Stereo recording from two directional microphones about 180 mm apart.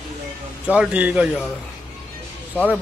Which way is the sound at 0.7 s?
5° right (ahead or behind).